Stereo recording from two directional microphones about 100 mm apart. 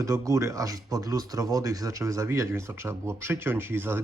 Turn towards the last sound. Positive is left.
turn(degrees=-25)  # may be behind; listen again after turning